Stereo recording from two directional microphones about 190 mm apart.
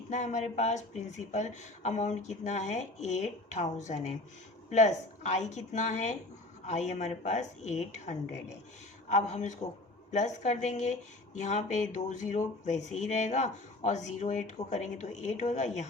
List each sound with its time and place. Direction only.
0.1 s speech: 40° left (ahead or behind)